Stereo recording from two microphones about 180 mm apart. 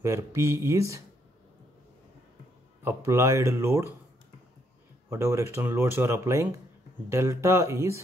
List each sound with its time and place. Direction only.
0.0 s speech: 15° right (ahead or behind)
2.8 s speech: 15° right (ahead or behind)
5.1 s speech: 15° right (ahead or behind)